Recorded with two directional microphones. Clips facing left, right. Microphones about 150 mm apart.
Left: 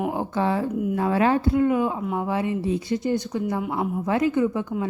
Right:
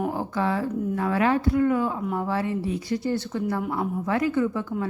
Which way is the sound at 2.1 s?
15° left (ahead or behind).